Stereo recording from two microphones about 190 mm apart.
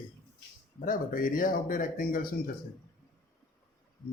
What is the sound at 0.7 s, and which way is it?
Speech, 45° left (ahead or behind).